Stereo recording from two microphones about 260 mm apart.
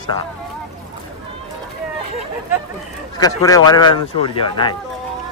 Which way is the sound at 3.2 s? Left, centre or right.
Centre.